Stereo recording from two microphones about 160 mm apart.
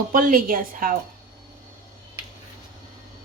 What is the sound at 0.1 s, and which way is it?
Speech, 60° right (ahead or behind).